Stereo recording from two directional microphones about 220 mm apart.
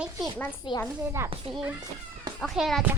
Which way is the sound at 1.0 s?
10° right (ahead or behind).